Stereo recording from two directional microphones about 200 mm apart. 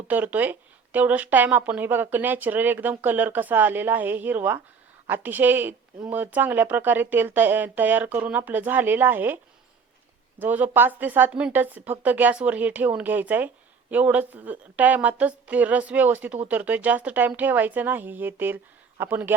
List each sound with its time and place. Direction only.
0.1 s a woman's voice: 10° right (ahead or behind)